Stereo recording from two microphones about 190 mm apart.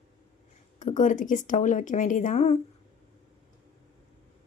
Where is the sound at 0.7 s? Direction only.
40° left (ahead or behind).